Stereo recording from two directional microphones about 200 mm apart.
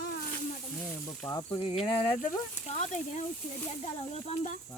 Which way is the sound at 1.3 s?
20° left (ahead or behind).